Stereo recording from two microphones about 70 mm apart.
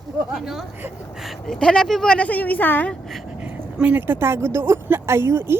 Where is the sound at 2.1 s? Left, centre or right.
Left.